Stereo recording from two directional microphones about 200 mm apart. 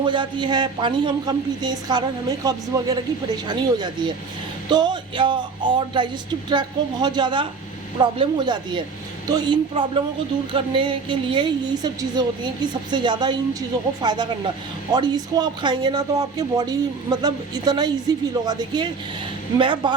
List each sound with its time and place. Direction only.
0.0 s speech: 25° right (ahead or behind)